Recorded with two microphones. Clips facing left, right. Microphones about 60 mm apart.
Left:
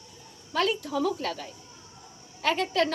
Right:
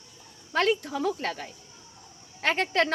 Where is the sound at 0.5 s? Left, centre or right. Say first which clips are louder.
Right 1 dB; right.